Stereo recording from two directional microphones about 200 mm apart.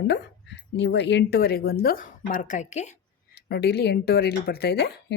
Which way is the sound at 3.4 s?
50° left (ahead or behind).